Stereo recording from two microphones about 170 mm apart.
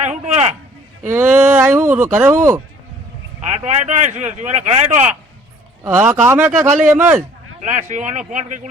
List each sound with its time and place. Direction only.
0.0 s a sound: 45° right (ahead or behind)
1.1 s speech: 15° right (ahead or behind)
3.5 s speech: 40° right (ahead or behind)
5.8 s speech: 15° right (ahead or behind)
7.2 s speech: 45° right (ahead or behind)